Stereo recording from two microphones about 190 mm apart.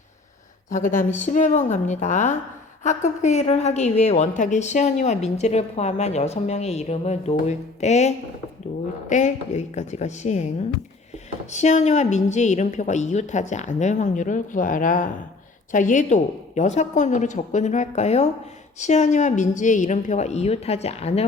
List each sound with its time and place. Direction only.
0.7 s a woman's voice: 45° left (ahead or behind)